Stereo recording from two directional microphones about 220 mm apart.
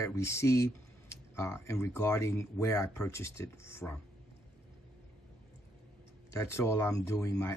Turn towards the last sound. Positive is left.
turn(degrees=15)  # may be behind; listen again after turning